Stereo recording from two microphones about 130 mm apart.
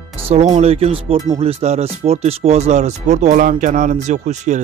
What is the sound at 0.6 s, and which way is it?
Speech, 50° right (ahead or behind).